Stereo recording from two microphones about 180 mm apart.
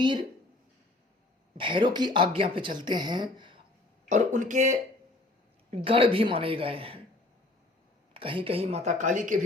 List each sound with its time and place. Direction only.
1.5 s speech: 25° right (ahead or behind)
4.1 s speech: 45° right (ahead or behind)
5.7 s speech: 30° right (ahead or behind)
8.1 s speech: 30° right (ahead or behind); by 9.4 s 45° right (ahead or behind)